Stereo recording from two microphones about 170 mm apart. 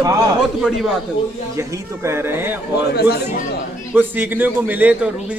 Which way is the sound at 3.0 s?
65° left (ahead or behind).